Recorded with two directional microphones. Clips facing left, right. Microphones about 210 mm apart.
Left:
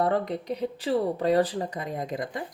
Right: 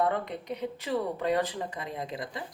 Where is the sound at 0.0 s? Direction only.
35° left (ahead or behind).